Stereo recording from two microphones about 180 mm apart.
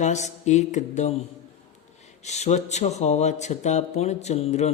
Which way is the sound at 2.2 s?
40° left (ahead or behind).